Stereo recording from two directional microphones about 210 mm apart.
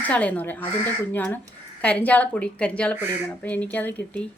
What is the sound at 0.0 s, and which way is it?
A woman's voice, 5° left (ahead or behind).